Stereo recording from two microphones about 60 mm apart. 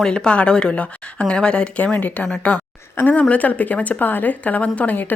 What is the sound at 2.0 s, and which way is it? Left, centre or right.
Speech, left.